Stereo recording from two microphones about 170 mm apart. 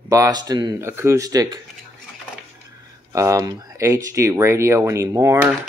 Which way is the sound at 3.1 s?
20° right (ahead or behind).